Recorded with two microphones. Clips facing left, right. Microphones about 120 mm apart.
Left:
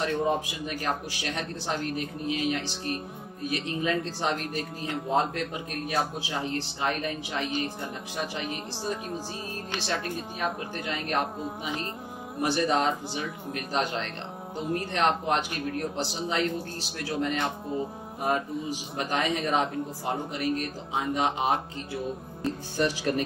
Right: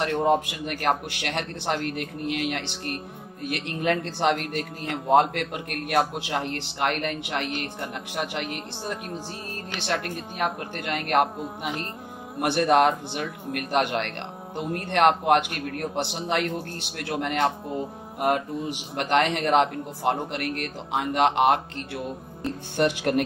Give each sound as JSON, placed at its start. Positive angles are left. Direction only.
{"t": 0.0, "sound": "a man's voice", "side_deg": -65}
{"t": 12.4, "sound": "a man's voice", "side_deg": -65}
{"t": 18.7, "sound": "a man's voice", "side_deg": -70}